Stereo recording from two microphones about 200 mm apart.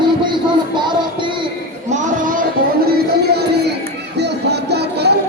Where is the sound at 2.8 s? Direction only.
50° right (ahead or behind).